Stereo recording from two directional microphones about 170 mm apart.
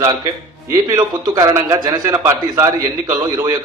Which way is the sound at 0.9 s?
20° right (ahead or behind).